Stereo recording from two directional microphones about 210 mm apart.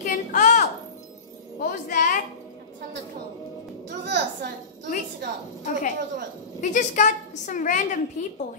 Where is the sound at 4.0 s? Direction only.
55° right (ahead or behind).